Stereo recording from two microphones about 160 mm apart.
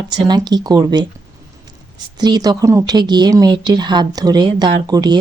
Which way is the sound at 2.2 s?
25° right (ahead or behind).